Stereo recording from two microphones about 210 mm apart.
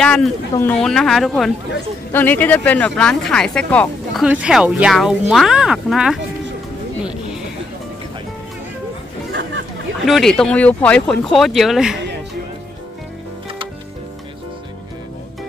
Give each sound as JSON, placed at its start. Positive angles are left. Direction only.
{"t": 0.0, "sound": "speech", "side_deg": 5}
{"t": 10.0, "sound": "speech", "side_deg": 0}